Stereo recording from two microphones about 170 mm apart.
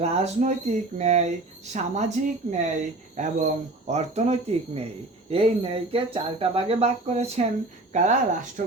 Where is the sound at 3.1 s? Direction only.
45° right (ahead or behind).